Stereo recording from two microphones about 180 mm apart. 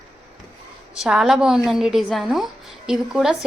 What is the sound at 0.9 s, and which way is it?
A woman's voice, centre (ahead or behind).